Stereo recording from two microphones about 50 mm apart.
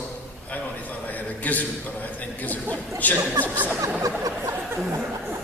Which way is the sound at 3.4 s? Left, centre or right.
Right.